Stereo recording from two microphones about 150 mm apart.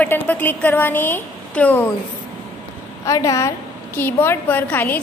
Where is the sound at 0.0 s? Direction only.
10° left (ahead or behind).